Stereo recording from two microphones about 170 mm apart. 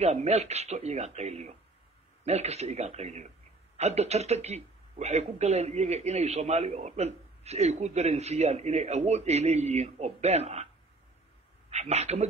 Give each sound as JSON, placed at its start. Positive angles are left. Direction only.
{"t": 0.0, "sound": "a man's voice", "side_deg": -40}
{"t": 11.7, "sound": "a man's voice", "side_deg": -40}